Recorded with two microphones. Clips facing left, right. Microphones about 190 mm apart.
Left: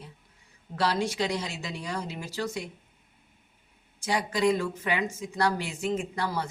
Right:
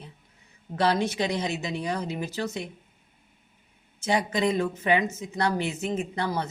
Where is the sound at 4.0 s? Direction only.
20° right (ahead or behind).